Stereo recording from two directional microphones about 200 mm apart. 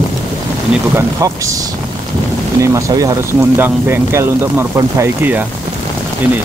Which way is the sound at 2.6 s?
15° right (ahead or behind).